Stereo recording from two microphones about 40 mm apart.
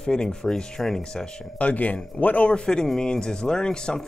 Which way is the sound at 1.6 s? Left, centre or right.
Left.